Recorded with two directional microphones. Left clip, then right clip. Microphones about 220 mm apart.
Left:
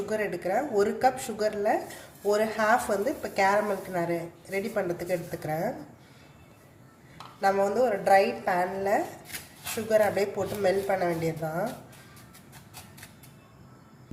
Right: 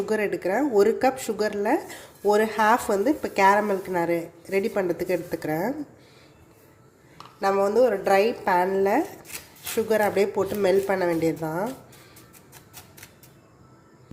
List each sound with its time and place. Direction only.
0.0 s a woman's voice: 35° right (ahead or behind)
7.4 s a woman's voice: 40° right (ahead or behind)